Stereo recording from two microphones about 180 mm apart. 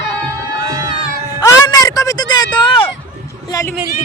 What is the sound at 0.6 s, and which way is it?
Music, 20° right (ahead or behind).